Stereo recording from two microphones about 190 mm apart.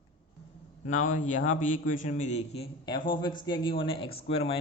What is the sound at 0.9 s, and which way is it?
Speech, 40° left (ahead or behind).